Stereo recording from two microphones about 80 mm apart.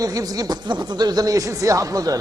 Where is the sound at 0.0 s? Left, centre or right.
Right.